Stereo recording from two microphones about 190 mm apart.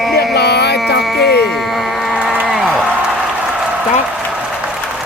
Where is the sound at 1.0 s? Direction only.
Centre (ahead or behind).